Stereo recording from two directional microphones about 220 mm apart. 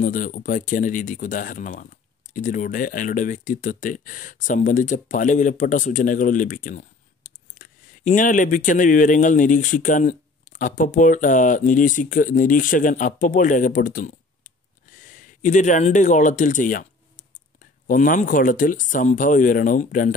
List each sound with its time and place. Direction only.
0.0 s speech: 35° left (ahead or behind)
17.8 s speech: 35° left (ahead or behind)